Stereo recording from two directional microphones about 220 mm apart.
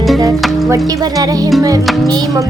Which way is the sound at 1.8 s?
Centre (ahead or behind).